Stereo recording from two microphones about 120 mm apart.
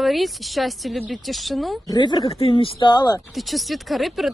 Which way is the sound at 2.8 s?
35° left (ahead or behind).